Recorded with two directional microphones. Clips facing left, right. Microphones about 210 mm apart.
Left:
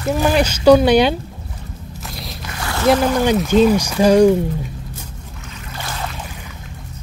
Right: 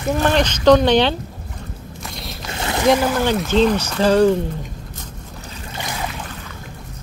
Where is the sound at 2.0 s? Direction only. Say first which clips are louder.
Left 1 dB; centre (ahead or behind).